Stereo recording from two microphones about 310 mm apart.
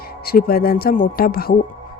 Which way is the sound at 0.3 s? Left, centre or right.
Left.